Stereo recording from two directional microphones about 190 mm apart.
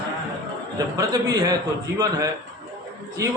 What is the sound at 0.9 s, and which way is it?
A man's voice, 20° right (ahead or behind).